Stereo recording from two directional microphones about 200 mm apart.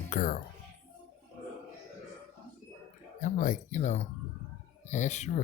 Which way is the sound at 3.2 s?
40° left (ahead or behind).